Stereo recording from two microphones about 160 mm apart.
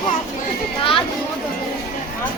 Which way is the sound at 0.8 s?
35° left (ahead or behind).